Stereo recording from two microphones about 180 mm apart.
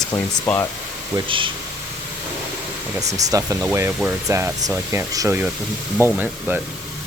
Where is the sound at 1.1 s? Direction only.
30° right (ahead or behind).